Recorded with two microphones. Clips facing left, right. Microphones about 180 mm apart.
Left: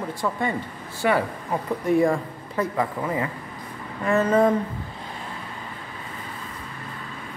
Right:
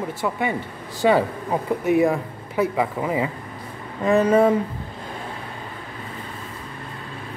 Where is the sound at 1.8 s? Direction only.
5° right (ahead or behind).